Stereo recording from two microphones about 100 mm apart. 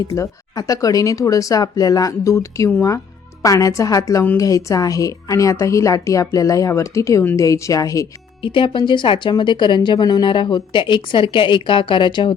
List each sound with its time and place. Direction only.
0.2 s a woman's voice: 35° left (ahead or behind)
8.4 s speech: 60° left (ahead or behind)